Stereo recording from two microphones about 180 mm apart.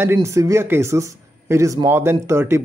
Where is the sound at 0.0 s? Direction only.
15° right (ahead or behind).